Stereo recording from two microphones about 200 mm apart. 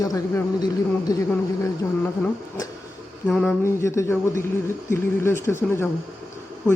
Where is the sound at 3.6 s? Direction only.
15° left (ahead or behind).